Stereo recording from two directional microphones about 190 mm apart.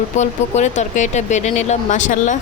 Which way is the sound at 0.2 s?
35° left (ahead or behind).